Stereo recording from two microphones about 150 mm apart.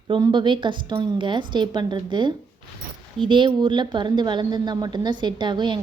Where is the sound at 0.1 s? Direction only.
30° right (ahead or behind).